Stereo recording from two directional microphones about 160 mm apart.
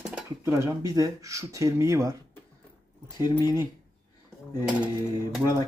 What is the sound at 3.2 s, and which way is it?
Speech, 20° right (ahead or behind).